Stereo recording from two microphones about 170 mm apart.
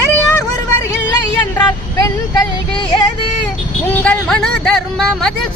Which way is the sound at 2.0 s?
20° left (ahead or behind).